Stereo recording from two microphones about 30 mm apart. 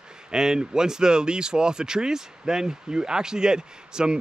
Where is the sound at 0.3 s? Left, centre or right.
Right.